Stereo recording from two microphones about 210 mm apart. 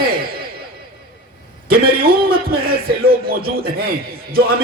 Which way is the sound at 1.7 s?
45° right (ahead or behind).